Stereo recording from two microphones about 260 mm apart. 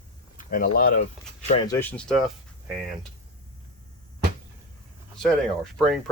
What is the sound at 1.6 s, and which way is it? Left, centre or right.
Speech, centre.